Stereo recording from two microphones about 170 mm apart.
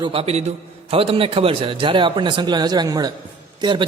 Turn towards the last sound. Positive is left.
turn(degrees=-25)  # may be behind; listen again after turning